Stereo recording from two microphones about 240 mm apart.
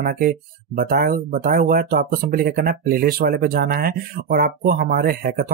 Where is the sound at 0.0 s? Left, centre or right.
Right.